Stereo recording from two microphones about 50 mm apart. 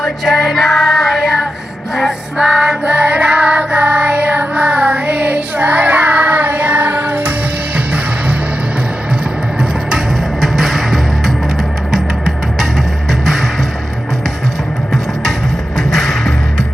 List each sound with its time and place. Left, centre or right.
0.0 s music: centre
2.5 s music: centre; by 7.3 s right
10.4 s music: centre
15.9 s music: centre